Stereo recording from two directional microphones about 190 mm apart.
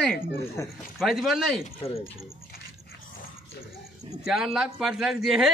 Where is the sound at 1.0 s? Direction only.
Centre (ahead or behind).